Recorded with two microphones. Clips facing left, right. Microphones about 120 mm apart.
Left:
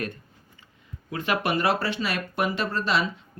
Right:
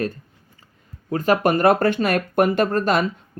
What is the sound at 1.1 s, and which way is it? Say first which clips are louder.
Speech: right 7 dB; 40° right (ahead or behind).